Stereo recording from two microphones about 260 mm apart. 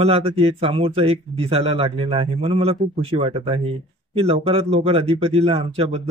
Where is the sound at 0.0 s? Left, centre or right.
Right.